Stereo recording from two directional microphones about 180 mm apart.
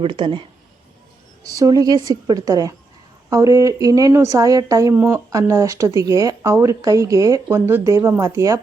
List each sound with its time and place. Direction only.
0.0 s a woman's voice: 25° right (ahead or behind)
1.5 s a woman's voice: 20° right (ahead or behind)